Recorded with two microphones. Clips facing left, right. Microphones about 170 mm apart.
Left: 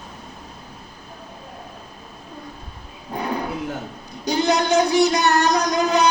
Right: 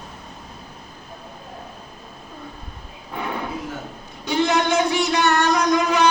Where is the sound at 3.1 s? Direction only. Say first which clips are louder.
Left 2 dB; 35° left (ahead or behind).